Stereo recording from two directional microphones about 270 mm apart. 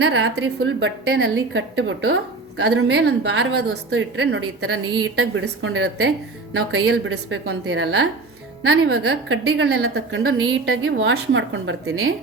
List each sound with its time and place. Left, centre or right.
0.0 s a woman's voice: right